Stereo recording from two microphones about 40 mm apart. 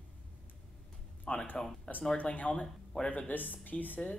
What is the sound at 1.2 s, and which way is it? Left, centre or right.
Music, left.